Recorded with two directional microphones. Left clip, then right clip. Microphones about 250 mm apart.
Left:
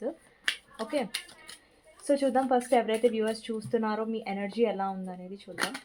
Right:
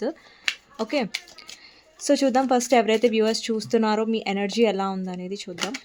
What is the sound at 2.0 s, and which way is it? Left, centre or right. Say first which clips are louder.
Speech: right 5 dB; right.